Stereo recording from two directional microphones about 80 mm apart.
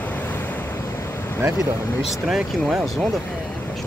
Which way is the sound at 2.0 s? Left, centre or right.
Centre.